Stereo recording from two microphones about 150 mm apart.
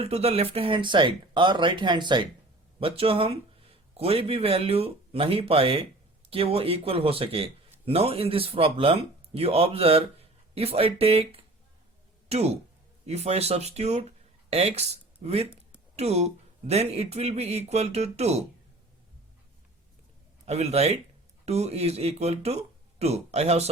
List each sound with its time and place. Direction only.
0.0 s a man's voice: 40° right (ahead or behind)
20.4 s speech: 45° right (ahead or behind)